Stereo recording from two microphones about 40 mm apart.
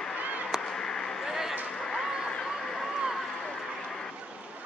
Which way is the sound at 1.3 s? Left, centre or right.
Centre.